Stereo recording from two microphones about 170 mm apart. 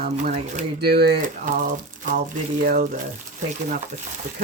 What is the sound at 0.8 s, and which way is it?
Speech, 70° right (ahead or behind).